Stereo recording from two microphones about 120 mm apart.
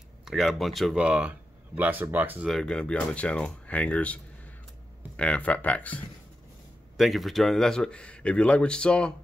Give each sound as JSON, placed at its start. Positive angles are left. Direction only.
{"t": 0.2, "sound": "speech", "side_deg": 0}
{"t": 2.4, "sound": "speech", "side_deg": 5}
{"t": 7.0, "sound": "speech", "side_deg": 0}